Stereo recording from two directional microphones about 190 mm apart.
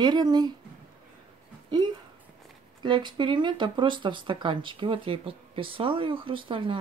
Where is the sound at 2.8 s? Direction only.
25° right (ahead or behind).